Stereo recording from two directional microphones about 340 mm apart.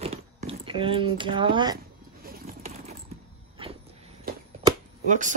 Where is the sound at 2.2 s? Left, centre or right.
Right.